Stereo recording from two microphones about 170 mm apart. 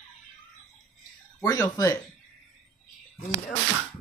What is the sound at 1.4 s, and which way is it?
Speech, 20° left (ahead or behind).